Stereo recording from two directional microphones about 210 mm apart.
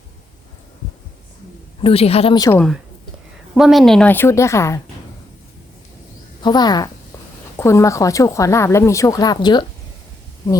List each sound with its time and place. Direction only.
1.8 s speech: 30° left (ahead or behind)
3.5 s speech: centre (ahead or behind)
6.4 s speech: 20° left (ahead or behind)